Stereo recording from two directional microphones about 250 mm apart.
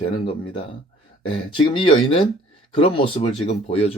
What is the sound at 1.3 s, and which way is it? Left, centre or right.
Speech, left.